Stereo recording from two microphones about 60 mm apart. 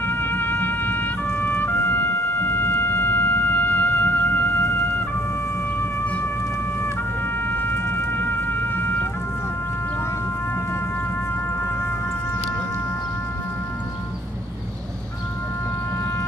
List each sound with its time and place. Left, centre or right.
0.0 s music: left
7.4 s music: left